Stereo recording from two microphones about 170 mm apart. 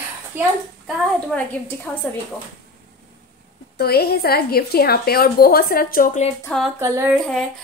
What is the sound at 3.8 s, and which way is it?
A woman's voice, 65° left (ahead or behind).